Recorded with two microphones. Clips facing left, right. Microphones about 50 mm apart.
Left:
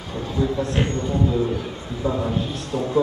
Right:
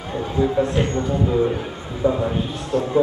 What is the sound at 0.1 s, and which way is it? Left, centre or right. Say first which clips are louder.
A man's voice: right 4 dB; right.